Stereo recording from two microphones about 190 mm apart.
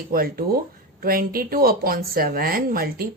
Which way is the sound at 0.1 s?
50° right (ahead or behind).